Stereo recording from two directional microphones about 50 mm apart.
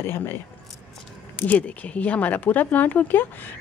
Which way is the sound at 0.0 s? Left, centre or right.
Left.